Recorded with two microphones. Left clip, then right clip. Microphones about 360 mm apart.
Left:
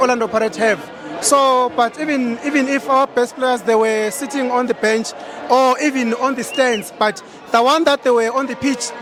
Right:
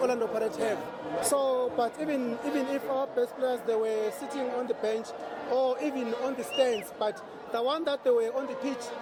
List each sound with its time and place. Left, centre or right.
0.0 s a man's voice: left